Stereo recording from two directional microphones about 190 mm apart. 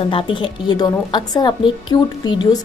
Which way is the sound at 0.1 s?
25° left (ahead or behind).